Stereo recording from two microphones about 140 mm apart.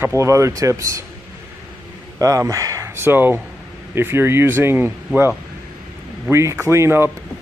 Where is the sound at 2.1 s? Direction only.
25° right (ahead or behind).